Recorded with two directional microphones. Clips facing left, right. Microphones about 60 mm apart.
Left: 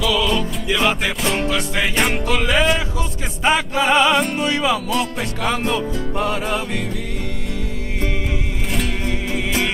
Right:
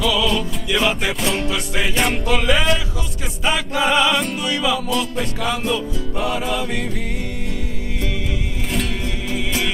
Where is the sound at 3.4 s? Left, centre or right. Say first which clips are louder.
Left 2 dB; left.